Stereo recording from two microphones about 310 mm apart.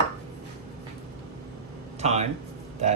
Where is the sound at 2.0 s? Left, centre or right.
Right.